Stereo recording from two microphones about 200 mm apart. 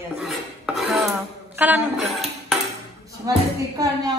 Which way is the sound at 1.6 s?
10° right (ahead or behind).